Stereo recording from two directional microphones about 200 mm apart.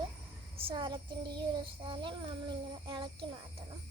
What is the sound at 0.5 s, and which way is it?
Child singing, 25° right (ahead or behind).